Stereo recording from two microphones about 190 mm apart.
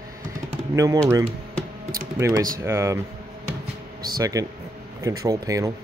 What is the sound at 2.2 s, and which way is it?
Speech, 20° right (ahead or behind).